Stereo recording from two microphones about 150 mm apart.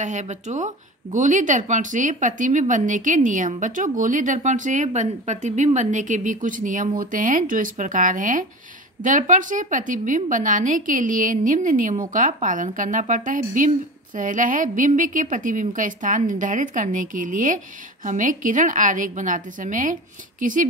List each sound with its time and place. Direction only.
0.0 s a woman's voice: 50° right (ahead or behind)